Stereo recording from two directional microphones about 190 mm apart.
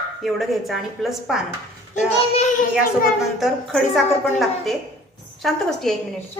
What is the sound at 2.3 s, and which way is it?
Speech, 45° left (ahead or behind).